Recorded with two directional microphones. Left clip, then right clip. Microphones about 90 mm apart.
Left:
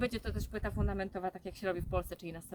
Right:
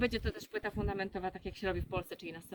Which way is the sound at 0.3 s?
35° left (ahead or behind).